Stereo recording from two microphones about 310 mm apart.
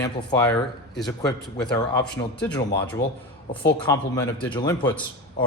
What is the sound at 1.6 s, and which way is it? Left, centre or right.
Speech, centre.